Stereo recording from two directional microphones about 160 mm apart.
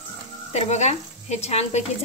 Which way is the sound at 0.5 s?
45° left (ahead or behind).